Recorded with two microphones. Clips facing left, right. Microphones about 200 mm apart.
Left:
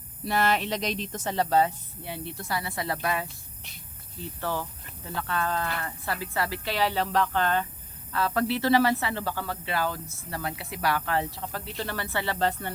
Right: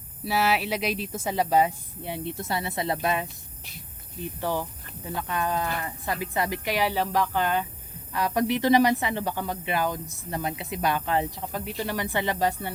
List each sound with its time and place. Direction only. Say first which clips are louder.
0.3 s speech: right 1 dB; 5° right (ahead or behind)